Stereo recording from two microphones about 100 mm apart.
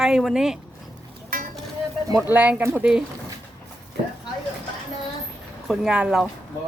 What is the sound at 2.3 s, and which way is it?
Speech, 15° right (ahead or behind).